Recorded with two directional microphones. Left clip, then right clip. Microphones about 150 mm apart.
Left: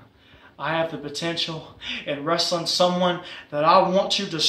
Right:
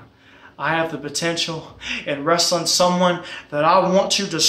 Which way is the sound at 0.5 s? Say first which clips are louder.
Right 4 dB; 15° right (ahead or behind).